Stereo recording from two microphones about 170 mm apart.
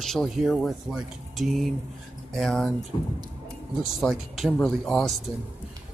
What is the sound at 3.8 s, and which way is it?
Speech, centre (ahead or behind).